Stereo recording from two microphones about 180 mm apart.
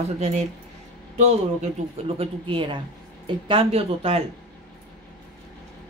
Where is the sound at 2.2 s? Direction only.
30° right (ahead or behind).